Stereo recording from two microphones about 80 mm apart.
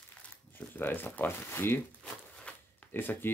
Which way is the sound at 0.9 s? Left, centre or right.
Left.